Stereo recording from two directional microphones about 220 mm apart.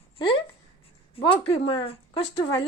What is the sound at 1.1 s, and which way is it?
Speech, 25° left (ahead or behind).